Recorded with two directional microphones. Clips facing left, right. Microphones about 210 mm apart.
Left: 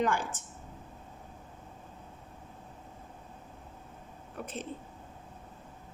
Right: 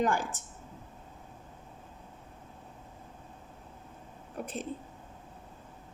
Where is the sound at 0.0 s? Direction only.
40° right (ahead or behind).